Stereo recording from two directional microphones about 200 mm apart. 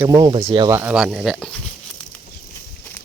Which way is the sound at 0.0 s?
20° right (ahead or behind).